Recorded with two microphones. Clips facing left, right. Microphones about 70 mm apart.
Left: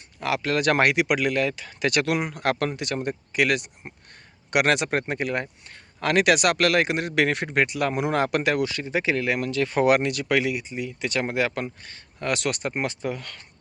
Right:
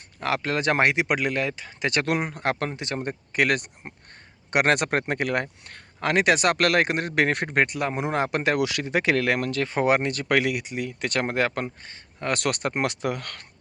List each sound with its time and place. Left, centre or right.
0.2 s speech: right
3.8 s a sound: right
4.8 s speech: right
6.0 s speech: right
6.6 s speech: right
7.8 s speech: right
8.5 s speech: right
9.6 s speech: right
12.3 s speech: right